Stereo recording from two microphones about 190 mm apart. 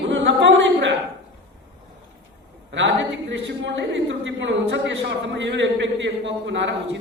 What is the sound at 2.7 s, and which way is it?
A woman's voice, 70° right (ahead or behind).